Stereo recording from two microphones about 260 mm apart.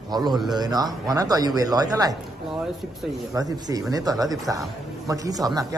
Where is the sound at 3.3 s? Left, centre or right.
Centre.